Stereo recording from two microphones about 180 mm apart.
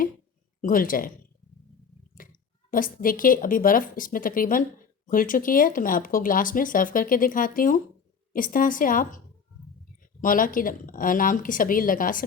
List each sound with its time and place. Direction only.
0.6 s speech: 50° left (ahead or behind)
2.1 s speech: 50° left (ahead or behind)